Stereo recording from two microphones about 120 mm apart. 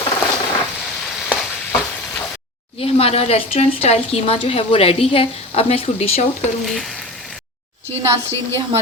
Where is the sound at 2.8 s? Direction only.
55° left (ahead or behind).